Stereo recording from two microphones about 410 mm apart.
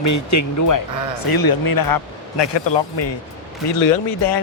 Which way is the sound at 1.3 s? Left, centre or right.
Left.